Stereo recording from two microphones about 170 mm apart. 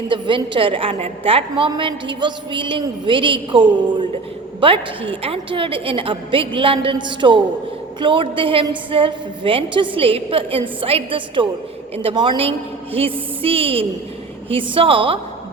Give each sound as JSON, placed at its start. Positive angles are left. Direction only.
{"t": 0.1, "sound": "a woman's voice", "side_deg": -30}